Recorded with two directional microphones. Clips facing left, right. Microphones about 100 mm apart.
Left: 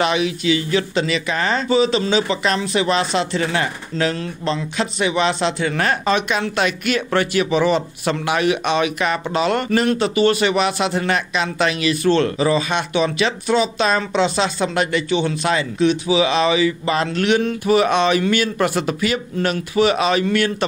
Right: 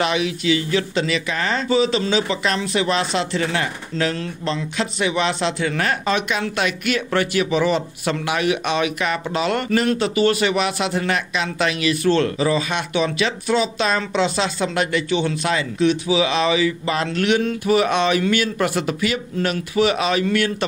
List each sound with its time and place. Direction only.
0.0 s speech: 25° left (ahead or behind)